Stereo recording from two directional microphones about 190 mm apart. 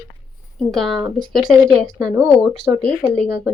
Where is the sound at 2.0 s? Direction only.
20° right (ahead or behind).